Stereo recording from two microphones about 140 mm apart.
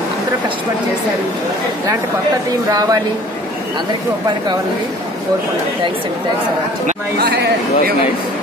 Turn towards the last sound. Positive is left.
turn(degrees=-90)